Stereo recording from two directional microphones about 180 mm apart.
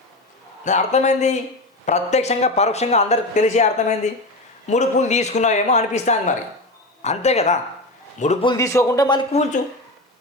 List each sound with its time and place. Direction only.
0.6 s speech: 40° left (ahead or behind)
8.4 s speech: 15° left (ahead or behind)
9.3 s speech: 40° left (ahead or behind)